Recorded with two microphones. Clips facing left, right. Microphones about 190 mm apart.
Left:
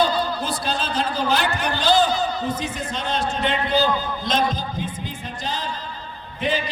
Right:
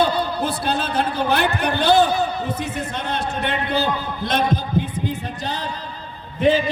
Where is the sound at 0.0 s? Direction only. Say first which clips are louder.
Right 2 dB; 60° right (ahead or behind).